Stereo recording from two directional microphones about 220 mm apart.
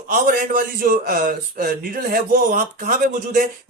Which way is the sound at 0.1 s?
40° right (ahead or behind).